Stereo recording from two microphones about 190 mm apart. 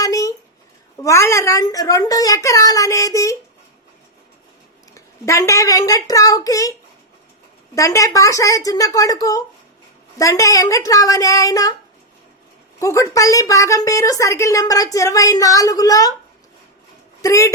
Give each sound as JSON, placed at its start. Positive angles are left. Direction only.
{"t": 0.0, "sound": "a sound", "side_deg": 20}
{"t": 1.0, "sound": "a woman's voice", "side_deg": 15}
{"t": 4.9, "sound": "a woman's voice", "side_deg": 15}
{"t": 7.8, "sound": "a woman's voice", "side_deg": 15}
{"t": 12.8, "sound": "a woman's voice", "side_deg": 15}
{"t": 17.2, "sound": "a woman's voice", "side_deg": 15}